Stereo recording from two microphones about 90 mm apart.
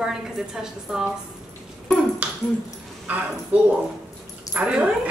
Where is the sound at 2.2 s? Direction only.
20° right (ahead or behind).